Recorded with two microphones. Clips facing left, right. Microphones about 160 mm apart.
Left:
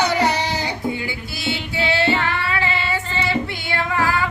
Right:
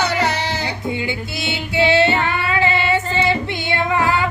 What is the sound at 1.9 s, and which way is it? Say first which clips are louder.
Child singing: right 2 dB; 20° right (ahead or behind).